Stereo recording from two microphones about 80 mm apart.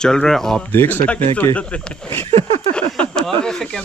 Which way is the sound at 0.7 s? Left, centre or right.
Left.